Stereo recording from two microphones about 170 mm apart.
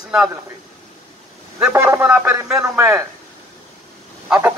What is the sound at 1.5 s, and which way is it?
Speech, 10° right (ahead or behind).